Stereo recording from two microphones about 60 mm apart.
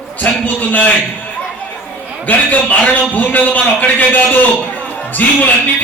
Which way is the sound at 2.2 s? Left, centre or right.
Left.